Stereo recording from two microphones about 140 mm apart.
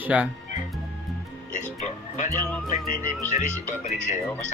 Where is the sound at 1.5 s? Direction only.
60° left (ahead or behind).